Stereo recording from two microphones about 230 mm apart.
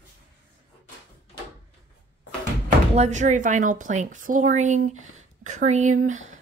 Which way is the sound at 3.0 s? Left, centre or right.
Right.